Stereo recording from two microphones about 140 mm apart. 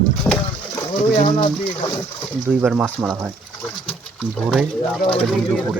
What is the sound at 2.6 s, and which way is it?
Speech, 10° right (ahead or behind).